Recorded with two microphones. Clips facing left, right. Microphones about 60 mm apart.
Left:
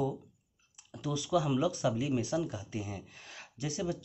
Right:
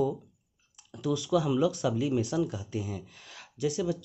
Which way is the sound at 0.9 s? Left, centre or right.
Left.